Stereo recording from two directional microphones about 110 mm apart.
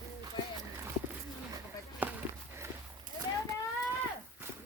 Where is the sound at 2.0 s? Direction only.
15° right (ahead or behind).